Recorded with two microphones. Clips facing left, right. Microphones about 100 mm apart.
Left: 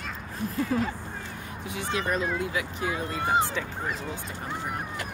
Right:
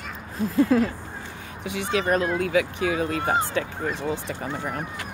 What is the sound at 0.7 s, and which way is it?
Speech, 90° right.